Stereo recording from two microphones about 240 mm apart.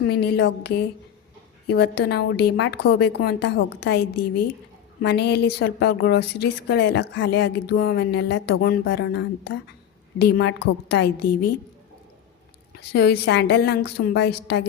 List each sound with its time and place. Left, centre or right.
0.1 s a woman's voice: left
1.7 s a woman's voice: left
4.2 s a woman's voice: left
5.0 s a woman's voice: left
12.7 s a woman's voice: left